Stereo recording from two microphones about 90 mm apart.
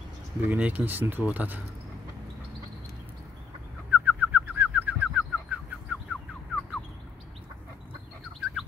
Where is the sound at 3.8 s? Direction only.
15° right (ahead or behind).